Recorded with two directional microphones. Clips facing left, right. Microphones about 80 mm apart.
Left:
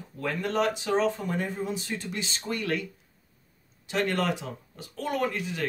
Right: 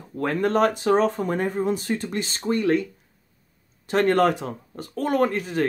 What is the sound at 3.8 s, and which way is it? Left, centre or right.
Speech, right.